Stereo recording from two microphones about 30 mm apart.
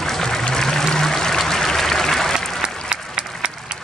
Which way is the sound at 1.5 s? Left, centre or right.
Centre.